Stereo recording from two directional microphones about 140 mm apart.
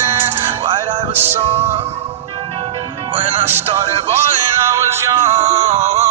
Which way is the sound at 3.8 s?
20° right (ahead or behind).